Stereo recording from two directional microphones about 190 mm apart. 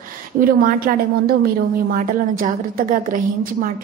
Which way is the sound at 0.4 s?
50° right (ahead or behind).